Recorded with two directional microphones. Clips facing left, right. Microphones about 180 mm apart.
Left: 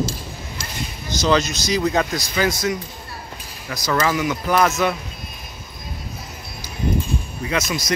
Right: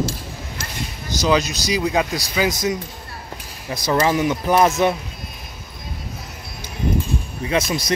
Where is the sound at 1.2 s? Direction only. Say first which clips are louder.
Even; 10° right (ahead or behind); by 4.9 s 25° right (ahead or behind).